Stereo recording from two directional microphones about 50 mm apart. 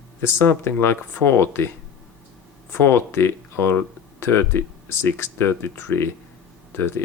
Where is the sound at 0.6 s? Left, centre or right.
Left.